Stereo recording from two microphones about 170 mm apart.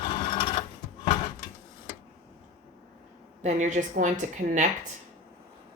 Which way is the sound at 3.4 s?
50° right (ahead or behind).